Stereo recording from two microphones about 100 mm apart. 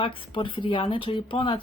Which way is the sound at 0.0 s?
60° left (ahead or behind).